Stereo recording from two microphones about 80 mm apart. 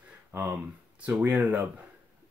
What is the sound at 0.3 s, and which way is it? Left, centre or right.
Speech, right.